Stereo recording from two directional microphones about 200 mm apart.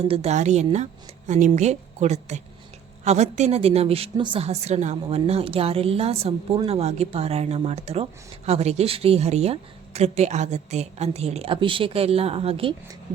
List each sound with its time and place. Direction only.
0.0 s speech: 30° right (ahead or behind)